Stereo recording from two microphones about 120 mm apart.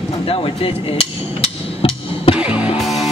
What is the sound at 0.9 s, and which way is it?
Hammer, 50° left (ahead or behind).